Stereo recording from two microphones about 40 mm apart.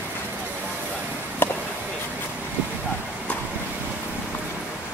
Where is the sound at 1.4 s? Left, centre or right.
Left.